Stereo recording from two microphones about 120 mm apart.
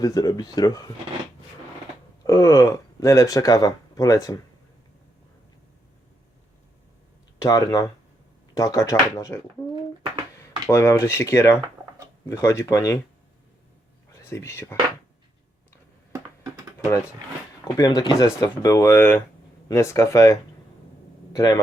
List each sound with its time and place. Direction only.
0.0 s speech: 30° left (ahead or behind)
2.2 s speech: 25° left (ahead or behind)
7.3 s speech: 30° left (ahead or behind)
10.7 s speech: 20° left (ahead or behind)
14.3 s speech: 20° left (ahead or behind)
17.7 s speech: 35° left (ahead or behind)